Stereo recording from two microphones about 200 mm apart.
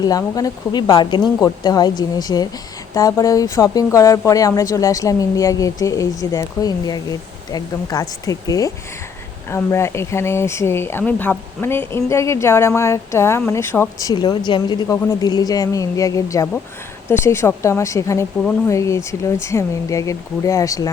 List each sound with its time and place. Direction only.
0.0 s a woman's voice: 20° left (ahead or behind)